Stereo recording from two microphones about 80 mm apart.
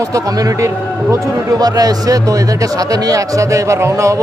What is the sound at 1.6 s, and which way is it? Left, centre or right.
A man's voice, right.